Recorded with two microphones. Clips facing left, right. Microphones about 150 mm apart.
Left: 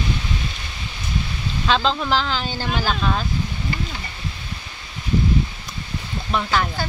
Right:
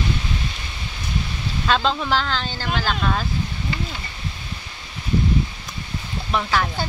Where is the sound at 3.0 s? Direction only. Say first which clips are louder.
Even; centre (ahead or behind).